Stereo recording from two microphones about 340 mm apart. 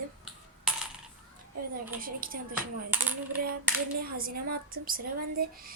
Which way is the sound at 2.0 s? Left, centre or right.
Right.